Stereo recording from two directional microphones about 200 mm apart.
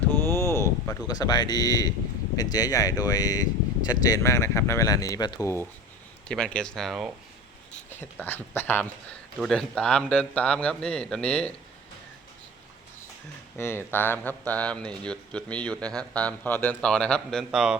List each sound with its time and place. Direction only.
0.3 s a sound: 15° left (ahead or behind)
2.3 s speech: 20° left (ahead or behind)
6.2 s speech: 5° left (ahead or behind)
7.9 s speech: 10° left (ahead or behind)
13.6 s speech: 10° left (ahead or behind)